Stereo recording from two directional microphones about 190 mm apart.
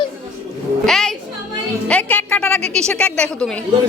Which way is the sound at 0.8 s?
Centre (ahead or behind).